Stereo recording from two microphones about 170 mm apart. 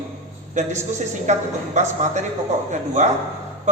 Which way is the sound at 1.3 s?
45° right (ahead or behind).